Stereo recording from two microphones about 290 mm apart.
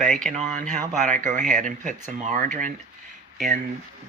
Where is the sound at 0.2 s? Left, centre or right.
Right.